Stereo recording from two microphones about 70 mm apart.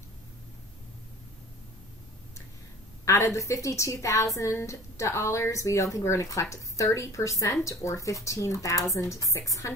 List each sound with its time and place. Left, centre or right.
3.1 s speech: left